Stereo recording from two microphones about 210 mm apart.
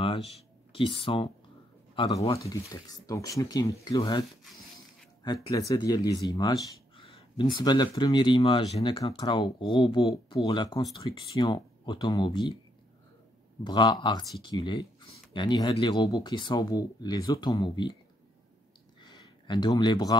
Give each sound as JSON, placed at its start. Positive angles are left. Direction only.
{"t": 0.7, "sound": "speech", "side_deg": 25}
{"t": 5.2, "sound": "speech", "side_deg": 20}
{"t": 13.7, "sound": "speech", "side_deg": 20}
{"t": 18.9, "sound": "a sound", "side_deg": 20}